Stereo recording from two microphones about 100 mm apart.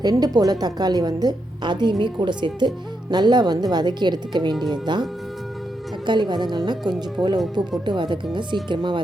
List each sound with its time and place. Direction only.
0.0 s a woman's voice: 40° right (ahead or behind)
6.1 s a woman's voice: 50° right (ahead or behind)